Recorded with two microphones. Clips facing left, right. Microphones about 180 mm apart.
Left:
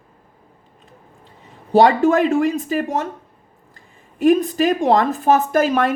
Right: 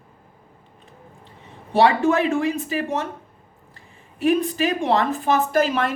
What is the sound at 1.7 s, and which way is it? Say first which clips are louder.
Speech: left 4 dB; 40° left (ahead or behind).